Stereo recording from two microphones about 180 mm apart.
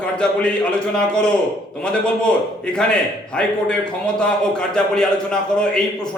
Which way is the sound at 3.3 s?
5° left (ahead or behind).